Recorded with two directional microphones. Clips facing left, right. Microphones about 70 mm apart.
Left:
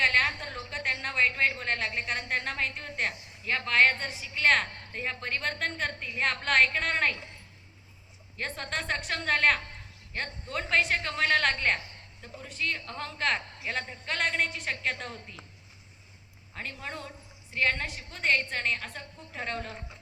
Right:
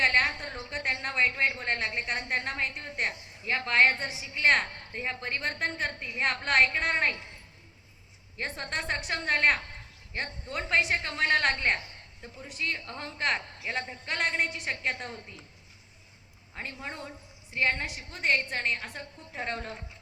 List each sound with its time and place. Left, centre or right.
0.0 s a sound: centre
2.1 s a woman's voice: right
3.1 s a sound: right
3.9 s a woman's voice: centre
8.4 s a woman's voice: centre
11.5 s a woman's voice: centre
14.8 s a woman's voice: centre
16.6 s a woman's voice: centre
19.5 s a woman's voice: right